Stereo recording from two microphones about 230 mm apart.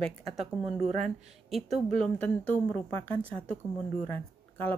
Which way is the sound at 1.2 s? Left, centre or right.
Centre.